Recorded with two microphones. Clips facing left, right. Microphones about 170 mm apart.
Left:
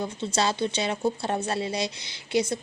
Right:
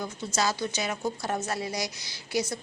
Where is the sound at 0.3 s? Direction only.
30° left (ahead or behind).